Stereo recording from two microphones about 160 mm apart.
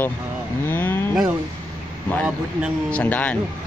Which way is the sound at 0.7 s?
15° left (ahead or behind).